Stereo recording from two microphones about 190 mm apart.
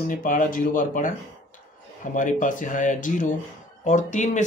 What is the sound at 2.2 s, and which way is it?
Speech, 45° left (ahead or behind).